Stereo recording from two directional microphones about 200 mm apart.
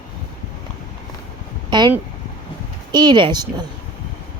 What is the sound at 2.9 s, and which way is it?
Speech, 20° right (ahead or behind).